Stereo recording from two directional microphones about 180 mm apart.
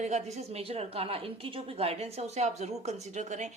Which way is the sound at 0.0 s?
40° right (ahead or behind).